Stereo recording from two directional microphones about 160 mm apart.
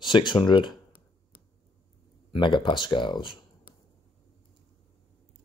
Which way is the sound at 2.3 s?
30° left (ahead or behind).